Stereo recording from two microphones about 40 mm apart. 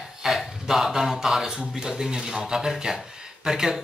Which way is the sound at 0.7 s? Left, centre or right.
Centre.